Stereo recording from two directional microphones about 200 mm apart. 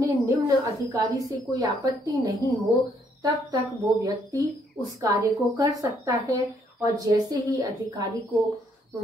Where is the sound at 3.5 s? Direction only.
15° right (ahead or behind).